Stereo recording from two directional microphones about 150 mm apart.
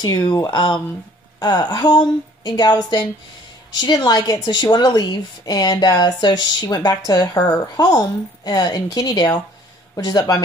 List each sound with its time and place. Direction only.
0.0 s a woman's voice: 30° left (ahead or behind)